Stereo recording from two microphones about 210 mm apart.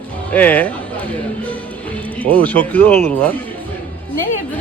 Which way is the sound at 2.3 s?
5° left (ahead or behind).